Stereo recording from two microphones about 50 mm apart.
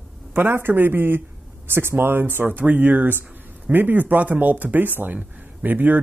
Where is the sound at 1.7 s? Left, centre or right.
Right.